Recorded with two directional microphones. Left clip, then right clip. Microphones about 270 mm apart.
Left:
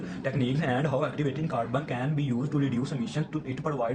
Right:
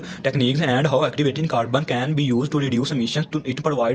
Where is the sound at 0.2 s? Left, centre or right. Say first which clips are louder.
Right 9 dB; right.